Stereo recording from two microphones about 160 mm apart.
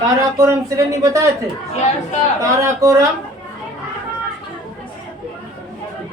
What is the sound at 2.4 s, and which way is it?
Speech, 20° right (ahead or behind).